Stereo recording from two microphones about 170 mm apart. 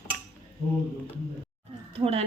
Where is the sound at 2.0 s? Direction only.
35° right (ahead or behind).